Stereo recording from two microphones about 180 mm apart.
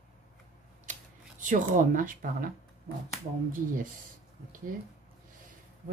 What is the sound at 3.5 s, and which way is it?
Speech, 50° right (ahead or behind).